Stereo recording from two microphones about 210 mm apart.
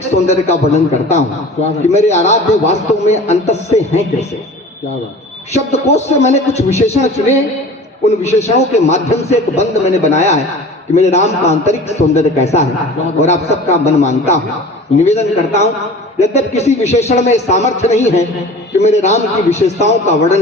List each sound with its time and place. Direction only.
0.3 s a man's voice: 30° left (ahead or behind)
5.7 s a man's voice: 30° left (ahead or behind)